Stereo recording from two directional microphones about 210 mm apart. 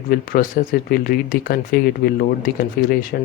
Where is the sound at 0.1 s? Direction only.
45° left (ahead or behind).